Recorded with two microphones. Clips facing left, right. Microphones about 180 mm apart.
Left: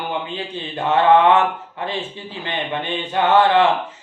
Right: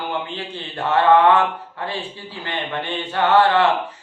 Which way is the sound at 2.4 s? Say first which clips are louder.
Left 1 dB; 20° left (ahead or behind).